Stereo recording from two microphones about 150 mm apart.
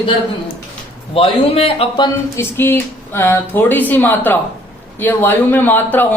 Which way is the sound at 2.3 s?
15° left (ahead or behind).